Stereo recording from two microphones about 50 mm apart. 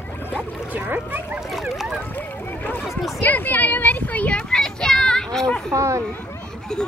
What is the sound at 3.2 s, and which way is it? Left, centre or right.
Speech, left.